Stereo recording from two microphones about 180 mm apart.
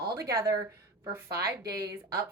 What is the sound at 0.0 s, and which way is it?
Speech, 20° right (ahead or behind).